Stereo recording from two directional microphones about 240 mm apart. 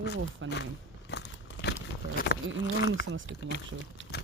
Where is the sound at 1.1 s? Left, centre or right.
Left.